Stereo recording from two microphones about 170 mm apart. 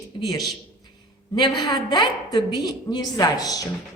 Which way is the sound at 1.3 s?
25° left (ahead or behind).